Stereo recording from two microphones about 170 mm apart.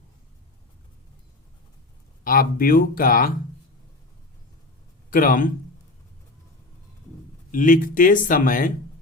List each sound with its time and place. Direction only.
2.2 s speech: 55° left (ahead or behind)
5.1 s speech: 55° left (ahead or behind)
7.5 s speech: 50° left (ahead or behind)